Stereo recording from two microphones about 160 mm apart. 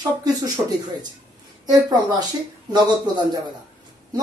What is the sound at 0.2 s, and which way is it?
Speech, 25° right (ahead or behind).